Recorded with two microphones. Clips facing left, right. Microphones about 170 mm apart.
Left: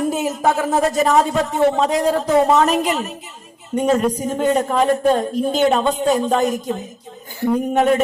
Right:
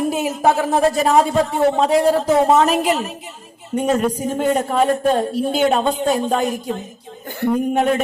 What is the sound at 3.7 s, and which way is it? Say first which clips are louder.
Speech: left 1 dB; 5° right (ahead or behind).